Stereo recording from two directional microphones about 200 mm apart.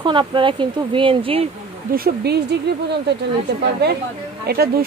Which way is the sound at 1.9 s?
50° right (ahead or behind).